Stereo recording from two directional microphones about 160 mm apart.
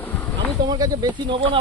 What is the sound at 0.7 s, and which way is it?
Speech, 25° right (ahead or behind).